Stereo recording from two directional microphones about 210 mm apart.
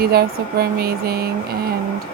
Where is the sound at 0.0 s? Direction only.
45° right (ahead or behind).